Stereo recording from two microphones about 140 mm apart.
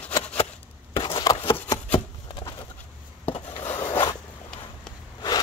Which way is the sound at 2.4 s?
35° left (ahead or behind).